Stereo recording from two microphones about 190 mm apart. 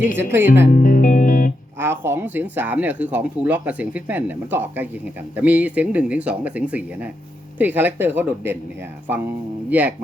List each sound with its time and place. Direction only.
0.2 s speech: 10° right (ahead or behind)
0.7 s music: 45° left (ahead or behind)
1.8 s speech: 10° right (ahead or behind)
9.6 s speech: 10° right (ahead or behind)